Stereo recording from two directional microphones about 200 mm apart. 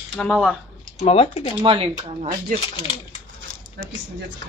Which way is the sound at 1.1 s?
30° left (ahead or behind).